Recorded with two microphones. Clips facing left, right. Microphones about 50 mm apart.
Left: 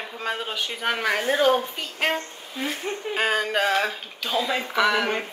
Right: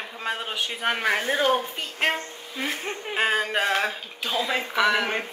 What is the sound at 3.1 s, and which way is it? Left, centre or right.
Speech, centre.